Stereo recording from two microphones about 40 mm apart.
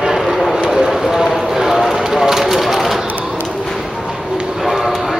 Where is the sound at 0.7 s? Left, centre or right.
Centre.